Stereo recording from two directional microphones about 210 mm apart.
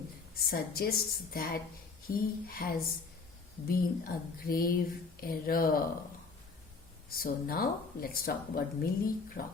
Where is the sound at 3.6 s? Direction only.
45° left (ahead or behind).